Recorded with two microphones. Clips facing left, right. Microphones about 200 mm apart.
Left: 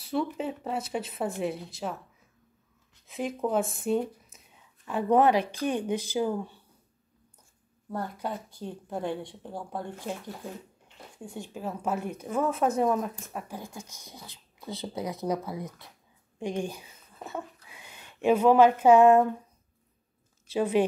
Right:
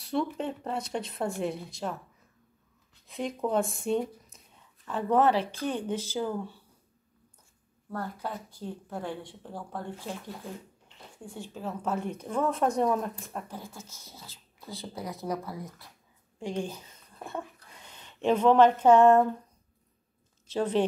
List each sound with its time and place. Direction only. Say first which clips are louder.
0.0 s speech: even; centre (ahead or behind)
3.1 s speech: left 1 dB; 5° left (ahead or behind)
7.9 s a woman's voice: left 2 dB; 15° left (ahead or behind)
11.3 s a woman's voice: left 1 dB; 15° left (ahead or behind)
20.4 s a woman's voice: left 2 dB; 10° left (ahead or behind)